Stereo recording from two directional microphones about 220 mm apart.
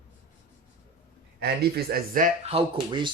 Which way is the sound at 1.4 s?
45° right (ahead or behind).